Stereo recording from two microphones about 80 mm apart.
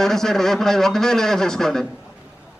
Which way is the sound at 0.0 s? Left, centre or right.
Centre.